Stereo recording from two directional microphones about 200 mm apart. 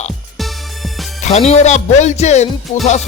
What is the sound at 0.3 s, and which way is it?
Music, centre (ahead or behind).